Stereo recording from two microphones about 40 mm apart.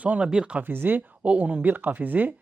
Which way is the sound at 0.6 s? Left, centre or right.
Right.